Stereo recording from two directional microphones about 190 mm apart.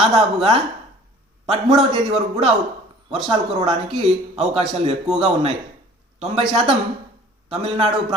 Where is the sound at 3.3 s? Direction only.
25° right (ahead or behind).